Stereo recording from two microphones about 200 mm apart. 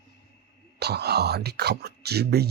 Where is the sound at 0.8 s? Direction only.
55° right (ahead or behind).